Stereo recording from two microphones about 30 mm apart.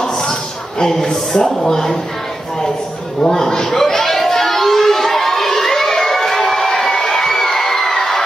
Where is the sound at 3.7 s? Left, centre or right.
Centre.